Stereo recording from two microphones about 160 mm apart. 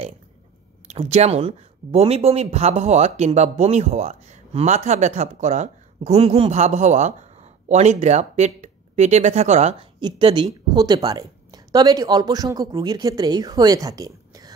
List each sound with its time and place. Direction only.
0.8 s speech: 45° right (ahead or behind)
9.9 s speech: 30° right (ahead or behind)